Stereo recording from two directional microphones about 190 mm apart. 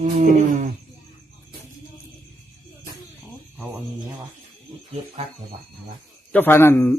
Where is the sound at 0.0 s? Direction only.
40° right (ahead or behind).